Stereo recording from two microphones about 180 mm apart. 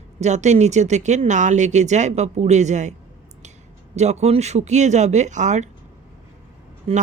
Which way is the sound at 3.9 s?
40° right (ahead or behind).